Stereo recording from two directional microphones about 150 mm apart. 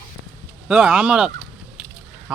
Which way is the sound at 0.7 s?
5° right (ahead or behind).